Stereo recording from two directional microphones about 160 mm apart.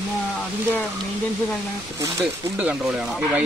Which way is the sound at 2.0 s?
20° right (ahead or behind).